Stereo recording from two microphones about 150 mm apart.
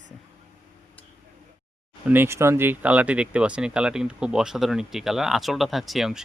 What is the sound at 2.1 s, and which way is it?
Speech, 15° right (ahead or behind).